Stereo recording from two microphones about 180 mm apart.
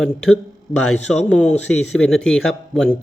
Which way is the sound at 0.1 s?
5° left (ahead or behind).